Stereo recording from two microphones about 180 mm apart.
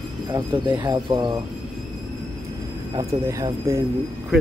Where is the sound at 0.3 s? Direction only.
20° right (ahead or behind).